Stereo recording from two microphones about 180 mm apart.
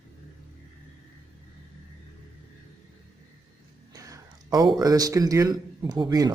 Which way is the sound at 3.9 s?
20° right (ahead or behind).